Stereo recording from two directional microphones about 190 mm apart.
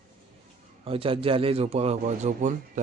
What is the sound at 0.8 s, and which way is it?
A man's voice, 30° right (ahead or behind).